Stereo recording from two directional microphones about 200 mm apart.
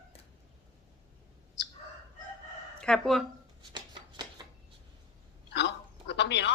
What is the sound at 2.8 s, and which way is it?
Speech, centre (ahead or behind).